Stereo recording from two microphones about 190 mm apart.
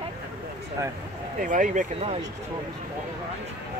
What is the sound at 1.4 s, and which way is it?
Speech, 45° right (ahead or behind).